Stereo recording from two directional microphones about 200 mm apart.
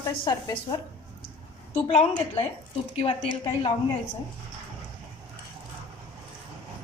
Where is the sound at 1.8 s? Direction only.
25° left (ahead or behind).